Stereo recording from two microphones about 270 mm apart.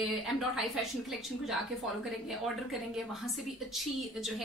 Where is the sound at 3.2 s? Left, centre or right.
Centre.